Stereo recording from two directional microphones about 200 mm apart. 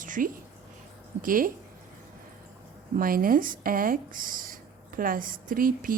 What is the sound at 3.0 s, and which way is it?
Speech, 45° right (ahead or behind).